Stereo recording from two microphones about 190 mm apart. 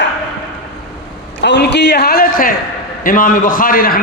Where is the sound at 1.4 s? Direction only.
65° left (ahead or behind).